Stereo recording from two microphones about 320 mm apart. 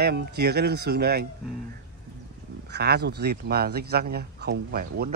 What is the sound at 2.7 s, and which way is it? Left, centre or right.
Speech, right.